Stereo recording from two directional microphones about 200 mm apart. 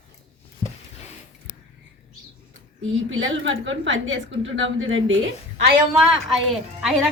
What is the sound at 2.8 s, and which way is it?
A woman's voice, 75° right (ahead or behind).